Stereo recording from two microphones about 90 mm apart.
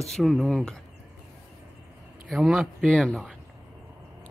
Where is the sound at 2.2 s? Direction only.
Centre (ahead or behind).